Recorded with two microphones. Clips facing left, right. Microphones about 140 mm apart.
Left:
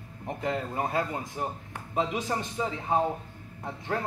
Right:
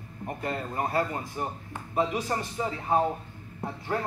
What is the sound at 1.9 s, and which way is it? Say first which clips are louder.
Speech: right 1 dB; 20° left (ahead or behind).